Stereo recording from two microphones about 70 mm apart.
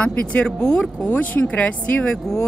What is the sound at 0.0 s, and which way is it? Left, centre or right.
Speech, centre.